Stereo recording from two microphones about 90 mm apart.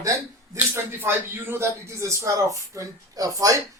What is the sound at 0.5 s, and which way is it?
Speech, 25° right (ahead or behind).